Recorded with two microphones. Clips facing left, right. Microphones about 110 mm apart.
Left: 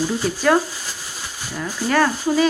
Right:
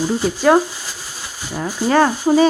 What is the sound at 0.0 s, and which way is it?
Speech, 20° right (ahead or behind).